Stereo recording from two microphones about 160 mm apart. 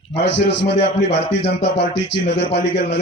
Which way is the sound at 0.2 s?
90° left.